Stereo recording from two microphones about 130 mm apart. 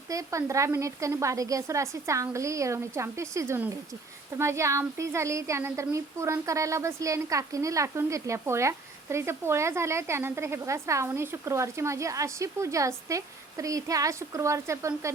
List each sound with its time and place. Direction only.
0.1 s a woman's voice: 25° right (ahead or behind)